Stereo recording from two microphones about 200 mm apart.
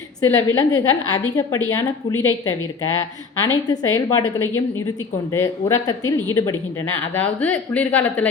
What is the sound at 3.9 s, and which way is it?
A woman's voice, 15° left (ahead or behind).